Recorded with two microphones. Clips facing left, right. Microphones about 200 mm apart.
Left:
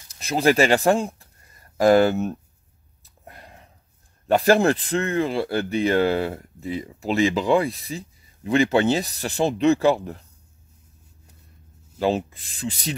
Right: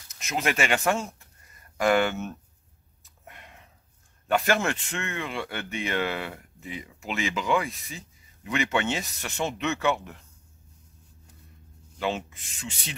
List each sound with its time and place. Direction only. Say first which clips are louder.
0.1 s speech: left 9 dB; 35° left (ahead or behind)
3.0 s a sound: left 4 dB; 35° left (ahead or behind)
4.3 s speech: left 8 dB; 35° left (ahead or behind)
12.0 s speech: left 7 dB; 35° left (ahead or behind)